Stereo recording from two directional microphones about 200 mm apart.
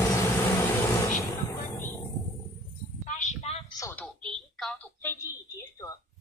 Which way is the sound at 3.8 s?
5° left (ahead or behind).